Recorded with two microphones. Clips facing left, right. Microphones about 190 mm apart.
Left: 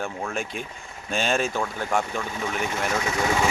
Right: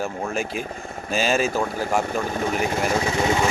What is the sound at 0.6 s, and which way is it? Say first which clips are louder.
Speech: right 9 dB; 55° right (ahead or behind).